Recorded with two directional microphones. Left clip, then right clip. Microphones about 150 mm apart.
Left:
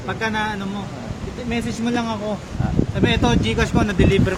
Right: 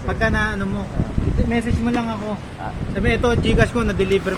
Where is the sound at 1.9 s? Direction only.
55° left (ahead or behind).